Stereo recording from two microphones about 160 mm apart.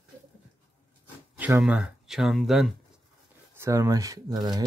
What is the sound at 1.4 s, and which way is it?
Speech, 10° right (ahead or behind).